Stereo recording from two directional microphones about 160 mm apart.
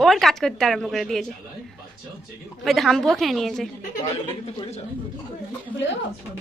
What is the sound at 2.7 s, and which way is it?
Speech, centre (ahead or behind).